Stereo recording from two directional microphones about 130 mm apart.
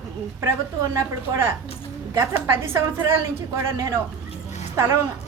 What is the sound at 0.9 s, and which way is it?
Speech, 20° right (ahead or behind).